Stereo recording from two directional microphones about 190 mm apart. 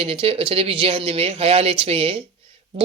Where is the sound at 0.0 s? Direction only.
30° right (ahead or behind).